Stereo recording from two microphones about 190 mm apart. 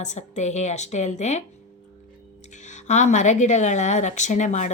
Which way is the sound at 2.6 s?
40° left (ahead or behind).